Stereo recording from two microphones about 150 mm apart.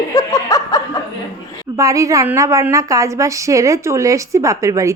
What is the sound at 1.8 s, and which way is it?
A woman's voice, 20° right (ahead or behind).